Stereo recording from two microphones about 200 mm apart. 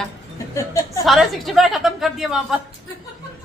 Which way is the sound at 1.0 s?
Centre (ahead or behind).